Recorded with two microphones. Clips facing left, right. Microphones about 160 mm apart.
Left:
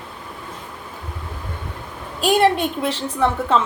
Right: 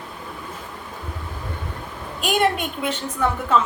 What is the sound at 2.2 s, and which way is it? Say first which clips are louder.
A woman's voice: left 5 dB; 30° left (ahead or behind).